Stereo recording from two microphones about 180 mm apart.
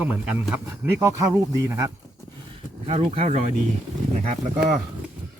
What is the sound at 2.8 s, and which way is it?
Speech, 35° right (ahead or behind).